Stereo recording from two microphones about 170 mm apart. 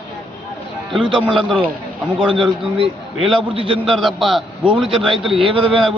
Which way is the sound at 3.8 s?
Centre (ahead or behind).